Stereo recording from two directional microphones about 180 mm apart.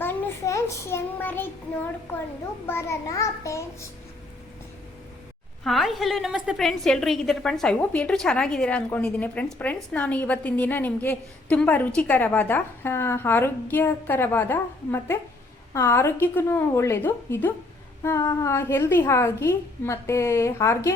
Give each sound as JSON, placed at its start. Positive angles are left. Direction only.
{"t": 0.0, "sound": "child singing", "side_deg": 15}
{"t": 2.6, "sound": "a woman's voice", "side_deg": 15}
{"t": 5.6, "sound": "a woman's voice", "side_deg": 0}